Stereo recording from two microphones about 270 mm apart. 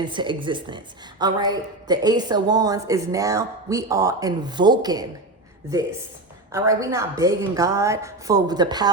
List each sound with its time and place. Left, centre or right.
0.0 s a woman's voice: centre
6.5 s a woman's voice: centre